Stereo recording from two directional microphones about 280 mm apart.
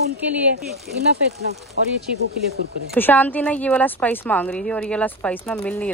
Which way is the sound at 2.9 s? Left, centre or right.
Centre.